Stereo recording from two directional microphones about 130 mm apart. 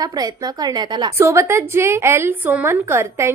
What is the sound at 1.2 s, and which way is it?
A woman's voice, 20° right (ahead or behind).